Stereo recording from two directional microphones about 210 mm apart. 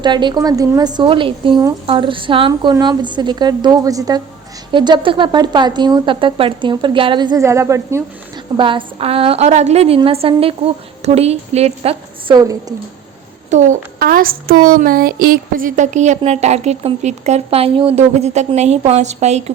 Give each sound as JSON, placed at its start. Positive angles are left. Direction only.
{"t": 0.0, "sound": "a woman's voice", "side_deg": -20}
{"t": 8.5, "sound": "a woman's voice", "side_deg": -25}
{"t": 12.4, "sound": "a woman's voice", "side_deg": -15}
{"t": 13.5, "sound": "speech", "side_deg": -35}